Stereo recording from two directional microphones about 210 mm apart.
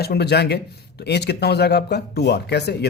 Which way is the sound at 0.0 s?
50° left (ahead or behind).